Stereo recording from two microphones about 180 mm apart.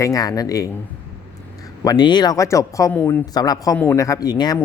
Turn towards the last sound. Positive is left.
turn(degrees=20)  # may be behind; listen again after turning